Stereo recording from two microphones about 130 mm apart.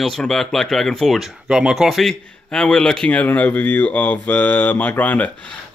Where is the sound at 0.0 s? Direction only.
5° left (ahead or behind).